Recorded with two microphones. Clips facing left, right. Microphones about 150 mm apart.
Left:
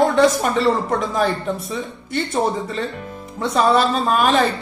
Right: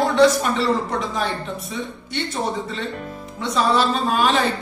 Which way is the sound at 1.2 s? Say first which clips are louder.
Left 5 dB; 45° left (ahead or behind).